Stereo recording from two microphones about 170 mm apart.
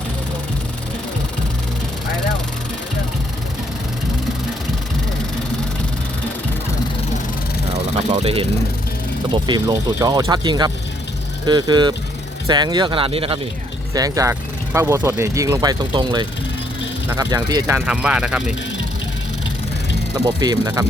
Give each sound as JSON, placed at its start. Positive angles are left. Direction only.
{"t": 8.2, "sound": "speech", "side_deg": -35}
{"t": 13.9, "sound": "speech", "side_deg": -20}
{"t": 17.7, "sound": "speech", "side_deg": -5}
{"t": 20.4, "sound": "speech", "side_deg": -20}